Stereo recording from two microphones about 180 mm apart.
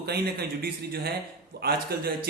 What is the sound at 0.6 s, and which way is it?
Speech, 55° right (ahead or behind).